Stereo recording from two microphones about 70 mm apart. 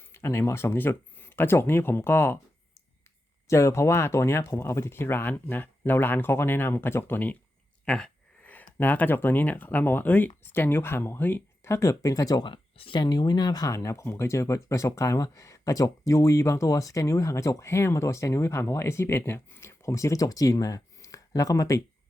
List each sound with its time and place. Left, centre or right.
0.0 s speech: left
3.4 s speech: left
7.9 s a sound: centre
8.4 s speech: left
13.0 s speech: left
13.7 s speech: left